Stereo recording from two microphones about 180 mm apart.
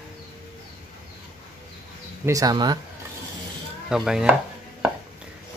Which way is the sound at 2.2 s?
20° right (ahead or behind).